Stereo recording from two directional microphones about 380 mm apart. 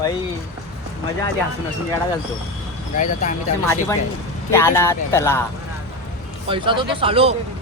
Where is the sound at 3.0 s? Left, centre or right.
Centre.